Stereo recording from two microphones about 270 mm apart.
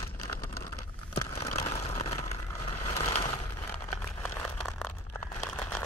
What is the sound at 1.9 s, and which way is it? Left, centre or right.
Vehicle, left.